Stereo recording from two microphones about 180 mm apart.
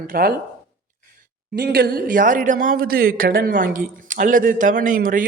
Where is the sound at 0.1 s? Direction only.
55° right (ahead or behind).